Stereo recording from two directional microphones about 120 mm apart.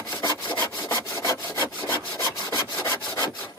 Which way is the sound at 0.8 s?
25° left (ahead or behind).